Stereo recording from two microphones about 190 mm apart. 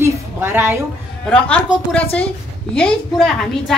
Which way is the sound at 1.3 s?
5° left (ahead or behind).